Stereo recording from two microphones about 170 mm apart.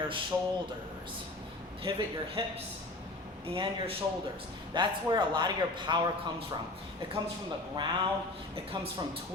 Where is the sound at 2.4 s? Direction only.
30° right (ahead or behind).